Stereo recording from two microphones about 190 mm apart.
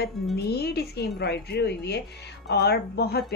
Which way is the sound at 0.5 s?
55° left (ahead or behind).